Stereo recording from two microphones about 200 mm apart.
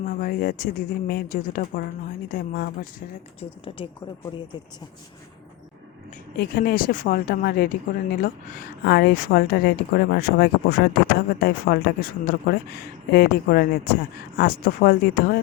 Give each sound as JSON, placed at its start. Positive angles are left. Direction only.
{"t": 0.0, "sound": "a woman's voice", "side_deg": 45}
{"t": 6.3, "sound": "a woman's voice", "side_deg": 50}